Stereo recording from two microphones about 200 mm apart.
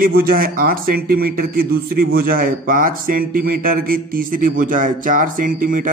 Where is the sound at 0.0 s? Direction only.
50° right (ahead or behind).